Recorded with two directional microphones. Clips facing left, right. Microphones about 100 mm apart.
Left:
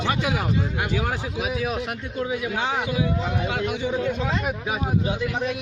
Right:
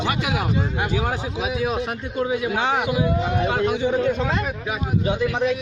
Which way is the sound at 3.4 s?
40° right (ahead or behind).